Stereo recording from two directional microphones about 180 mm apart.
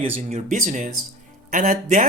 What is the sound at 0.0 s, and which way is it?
Speech, 35° right (ahead or behind).